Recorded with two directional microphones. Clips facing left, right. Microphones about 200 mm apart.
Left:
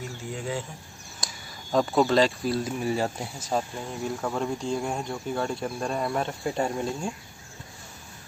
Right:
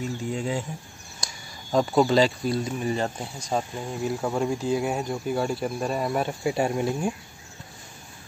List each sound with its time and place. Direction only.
0.4 s speech: 15° right (ahead or behind)
1.2 s speech: centre (ahead or behind)
4.2 s speech: 10° right (ahead or behind)